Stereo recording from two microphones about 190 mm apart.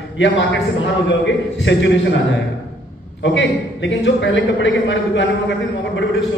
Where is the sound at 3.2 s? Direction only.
75° left (ahead or behind).